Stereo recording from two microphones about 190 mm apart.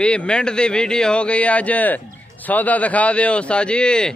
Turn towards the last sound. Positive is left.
turn(degrees=5)  # may be behind; listen again after turning